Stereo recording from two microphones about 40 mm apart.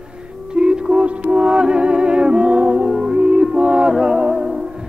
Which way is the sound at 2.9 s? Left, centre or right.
Centre.